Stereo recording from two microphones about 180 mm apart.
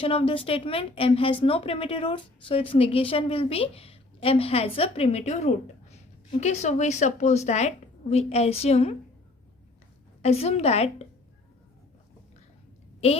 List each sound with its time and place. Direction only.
0.0 s a woman's voice: 30° left (ahead or behind)
10.2 s a woman's voice: 35° left (ahead or behind)